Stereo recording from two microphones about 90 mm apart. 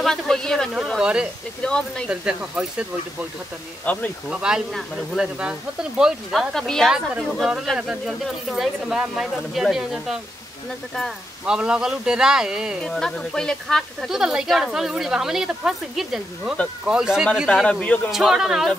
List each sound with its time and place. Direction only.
0.0 s speech: 5° left (ahead or behind)
0.9 s speech: 10° right (ahead or behind)
1.6 s speech: 10° left (ahead or behind)
2.0 s speech: 10° right (ahead or behind)
3.8 s speech: 15° left (ahead or behind)
4.3 s speech: 10° right (ahead or behind)
6.5 s a woman's voice: 5° left (ahead or behind)
11.4 s speech: 10° right (ahead or behind)
12.8 s a woman's voice: 5° left (ahead or behind)
14.0 s a woman's voice: 5° right (ahead or behind)
17.6 s speech: 15° left (ahead or behind)
18.1 s a woman's voice: 5° right (ahead or behind)